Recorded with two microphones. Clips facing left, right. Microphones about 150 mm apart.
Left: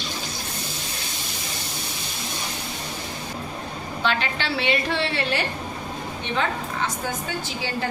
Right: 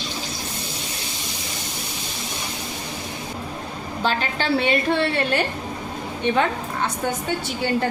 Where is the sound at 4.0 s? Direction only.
40° right (ahead or behind).